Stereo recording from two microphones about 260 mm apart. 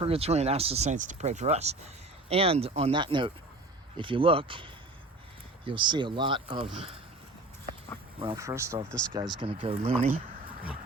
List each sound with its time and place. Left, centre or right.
0.0 s speech: right
8.2 s speech: centre
9.4 s speech: right